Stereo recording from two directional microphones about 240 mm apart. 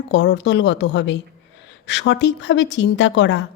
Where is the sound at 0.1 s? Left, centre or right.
Left.